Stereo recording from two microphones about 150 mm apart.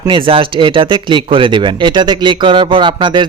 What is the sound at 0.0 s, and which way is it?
Speech, 35° right (ahead or behind).